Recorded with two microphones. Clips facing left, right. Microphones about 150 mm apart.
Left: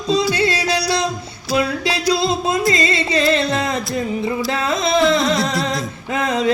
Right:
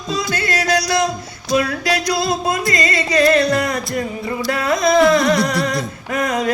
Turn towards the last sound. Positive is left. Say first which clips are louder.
# right 2 dB
turn(degrees=25)  # may be behind; listen again after turning